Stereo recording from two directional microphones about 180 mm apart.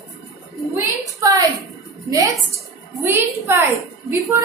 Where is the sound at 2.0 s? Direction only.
20° right (ahead or behind).